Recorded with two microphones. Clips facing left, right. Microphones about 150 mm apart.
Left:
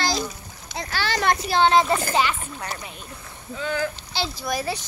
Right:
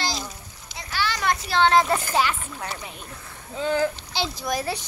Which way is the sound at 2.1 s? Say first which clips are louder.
Left 1 dB; 5° right (ahead or behind).